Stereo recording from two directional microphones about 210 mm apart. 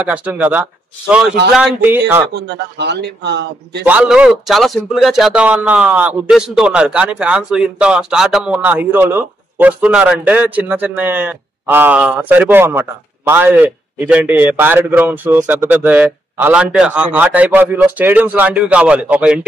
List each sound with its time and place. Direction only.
0.0 s a man's voice: 5° right (ahead or behind)
2.2 s a man's voice: 55° right (ahead or behind)
3.8 s a man's voice: 5° right (ahead or behind)